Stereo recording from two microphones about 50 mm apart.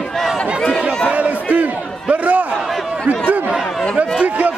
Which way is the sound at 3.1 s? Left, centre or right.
Right.